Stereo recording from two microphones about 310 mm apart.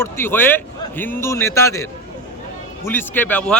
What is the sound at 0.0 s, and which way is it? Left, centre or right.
A man's voice, centre.